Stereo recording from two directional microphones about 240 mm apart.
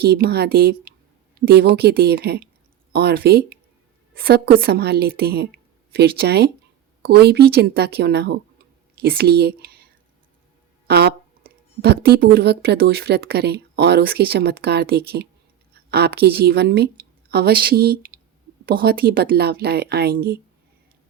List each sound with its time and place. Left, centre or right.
0.0 s speech: right
10.8 s a woman's voice: right